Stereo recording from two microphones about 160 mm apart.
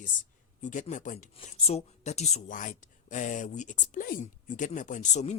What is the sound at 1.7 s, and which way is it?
Speech, 40° left (ahead or behind).